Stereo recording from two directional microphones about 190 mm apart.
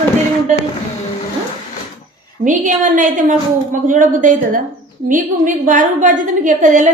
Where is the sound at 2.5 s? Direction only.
45° right (ahead or behind).